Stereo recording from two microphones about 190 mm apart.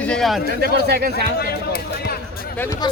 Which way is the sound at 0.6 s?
55° right (ahead or behind).